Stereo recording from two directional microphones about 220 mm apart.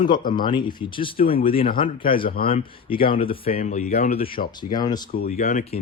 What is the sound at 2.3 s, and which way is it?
Speech, 45° left (ahead or behind).